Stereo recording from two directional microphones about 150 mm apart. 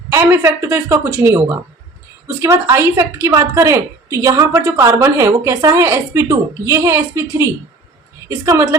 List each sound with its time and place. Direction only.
0.1 s a woman's voice: 15° right (ahead or behind)